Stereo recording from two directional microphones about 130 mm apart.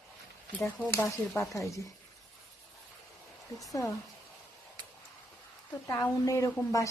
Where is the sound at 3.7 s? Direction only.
25° left (ahead or behind).